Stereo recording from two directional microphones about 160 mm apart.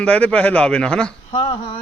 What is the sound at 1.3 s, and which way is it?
Speech, 35° left (ahead or behind).